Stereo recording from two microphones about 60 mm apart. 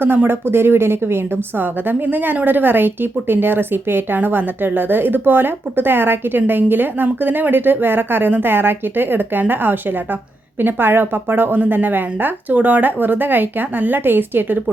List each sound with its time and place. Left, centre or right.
0.0 s a woman's voice: right